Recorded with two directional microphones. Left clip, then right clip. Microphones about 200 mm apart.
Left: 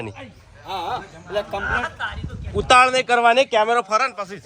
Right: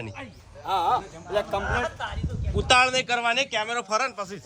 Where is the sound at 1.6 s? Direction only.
40° right (ahead or behind).